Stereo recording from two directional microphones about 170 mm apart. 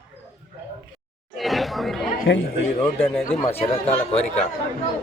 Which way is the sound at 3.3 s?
35° left (ahead or behind).